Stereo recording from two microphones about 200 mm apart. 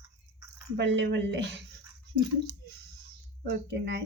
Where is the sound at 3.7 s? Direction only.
60° right (ahead or behind).